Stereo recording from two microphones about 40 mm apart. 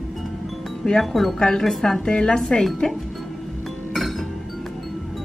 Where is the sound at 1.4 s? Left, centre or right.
Centre.